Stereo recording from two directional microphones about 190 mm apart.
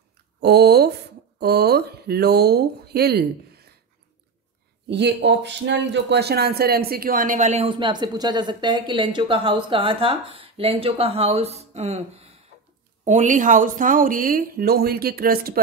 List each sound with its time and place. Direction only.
0.4 s speech: 60° right (ahead or behind)
4.8 s speech: 65° right (ahead or behind)